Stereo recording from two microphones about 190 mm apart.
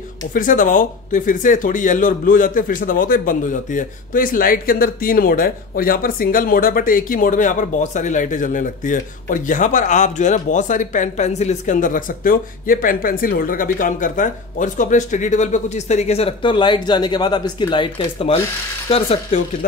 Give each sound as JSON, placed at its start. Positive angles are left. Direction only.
{"t": 0.3, "sound": "speech", "side_deg": 45}